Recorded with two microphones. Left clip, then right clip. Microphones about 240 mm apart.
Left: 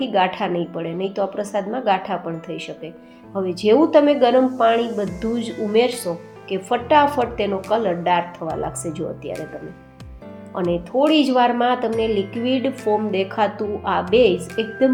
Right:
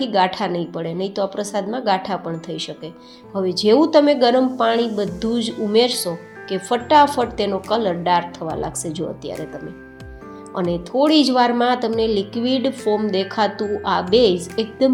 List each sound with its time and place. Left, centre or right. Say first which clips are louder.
0.0 s speech: right 1 dB; right
10.7 s speech: even; right